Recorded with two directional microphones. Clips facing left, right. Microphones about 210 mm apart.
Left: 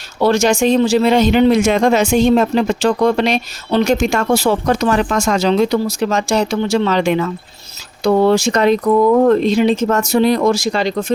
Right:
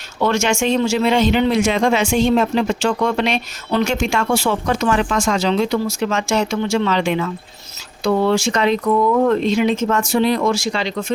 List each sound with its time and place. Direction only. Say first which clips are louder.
0.2 s speech: left 5 dB; 35° left (ahead or behind)